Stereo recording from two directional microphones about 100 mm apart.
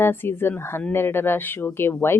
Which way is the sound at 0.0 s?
20° left (ahead or behind).